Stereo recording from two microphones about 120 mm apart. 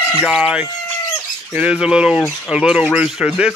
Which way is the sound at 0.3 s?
10° right (ahead or behind).